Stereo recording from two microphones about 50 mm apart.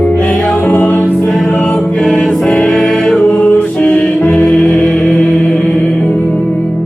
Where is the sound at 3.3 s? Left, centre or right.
Left; by 5.8 s centre.